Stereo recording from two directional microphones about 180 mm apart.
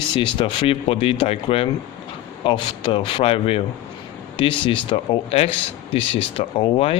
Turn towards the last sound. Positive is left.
turn(degrees=30)  # may be behind; listen again after turning